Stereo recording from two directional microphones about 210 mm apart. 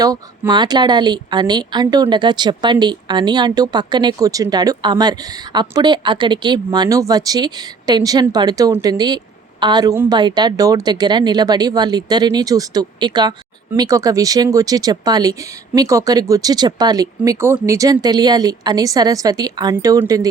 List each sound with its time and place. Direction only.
0.0 s speech: 20° right (ahead or behind)